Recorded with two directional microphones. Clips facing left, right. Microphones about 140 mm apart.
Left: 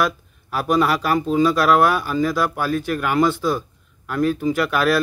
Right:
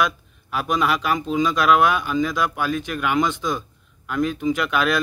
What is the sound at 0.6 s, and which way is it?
Speech, 10° left (ahead or behind).